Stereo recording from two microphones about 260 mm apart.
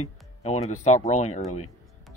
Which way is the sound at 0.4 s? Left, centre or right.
Left.